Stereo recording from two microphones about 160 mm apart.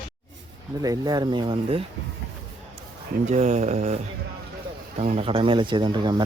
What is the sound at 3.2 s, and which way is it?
Speech, 45° right (ahead or behind).